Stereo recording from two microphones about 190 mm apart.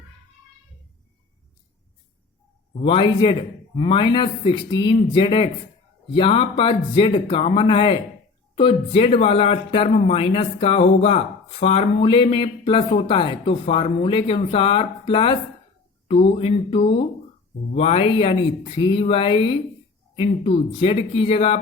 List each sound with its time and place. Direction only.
2.7 s speech: 30° left (ahead or behind)